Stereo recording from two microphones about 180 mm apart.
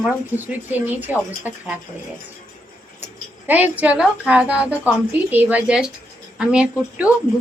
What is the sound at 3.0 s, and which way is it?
A woman's voice, 10° right (ahead or behind).